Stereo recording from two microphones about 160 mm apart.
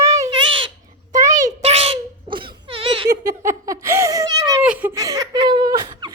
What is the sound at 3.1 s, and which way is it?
Giggle, 20° right (ahead or behind).